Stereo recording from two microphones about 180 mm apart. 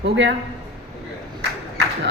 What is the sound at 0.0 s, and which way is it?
Speech, 75° right (ahead or behind).